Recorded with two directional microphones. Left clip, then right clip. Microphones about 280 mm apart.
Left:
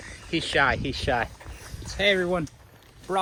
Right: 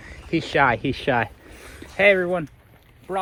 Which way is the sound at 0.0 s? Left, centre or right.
Centre.